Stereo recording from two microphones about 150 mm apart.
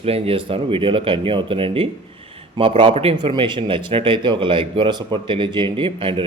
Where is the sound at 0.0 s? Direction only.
40° right (ahead or behind).